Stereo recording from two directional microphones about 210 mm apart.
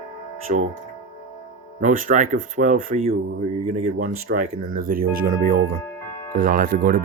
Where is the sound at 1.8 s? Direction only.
40° right (ahead or behind).